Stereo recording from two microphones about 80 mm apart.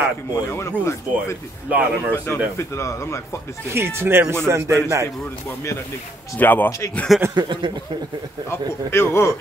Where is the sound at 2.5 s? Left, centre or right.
Left.